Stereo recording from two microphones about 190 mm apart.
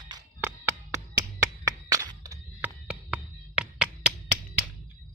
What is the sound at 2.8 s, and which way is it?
Music, 5° right (ahead or behind).